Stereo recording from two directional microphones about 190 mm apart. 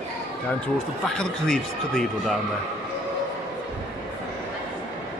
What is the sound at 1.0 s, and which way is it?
A man's voice, 5° left (ahead or behind).